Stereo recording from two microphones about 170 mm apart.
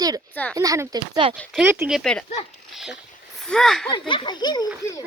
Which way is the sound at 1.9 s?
5° left (ahead or behind).